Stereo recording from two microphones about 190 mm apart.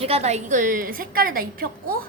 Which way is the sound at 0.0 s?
35° right (ahead or behind).